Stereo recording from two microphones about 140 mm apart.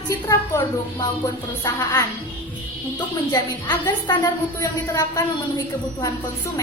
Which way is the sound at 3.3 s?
30° left (ahead or behind).